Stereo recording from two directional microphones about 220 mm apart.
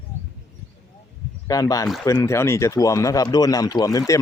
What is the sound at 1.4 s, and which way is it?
Speech, 15° left (ahead or behind).